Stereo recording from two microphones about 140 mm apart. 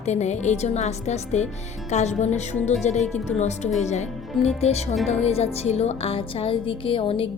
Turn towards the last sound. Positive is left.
turn(degrees=40)  # may be behind; listen again after turning